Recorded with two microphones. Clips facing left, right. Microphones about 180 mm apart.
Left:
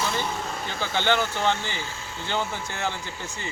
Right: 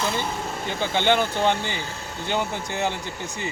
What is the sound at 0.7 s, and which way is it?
Speech, 15° right (ahead or behind).